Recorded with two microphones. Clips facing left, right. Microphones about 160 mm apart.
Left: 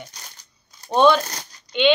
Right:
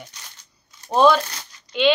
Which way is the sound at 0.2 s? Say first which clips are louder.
Left 2 dB; 40° left (ahead or behind).